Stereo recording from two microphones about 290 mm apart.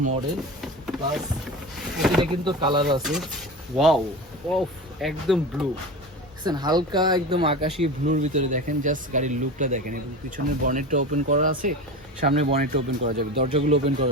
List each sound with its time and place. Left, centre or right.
0.6 s vehicle: centre
2.0 s speech: centre
2.3 s speech: centre
3.0 s speech: centre
6.4 s speech: centre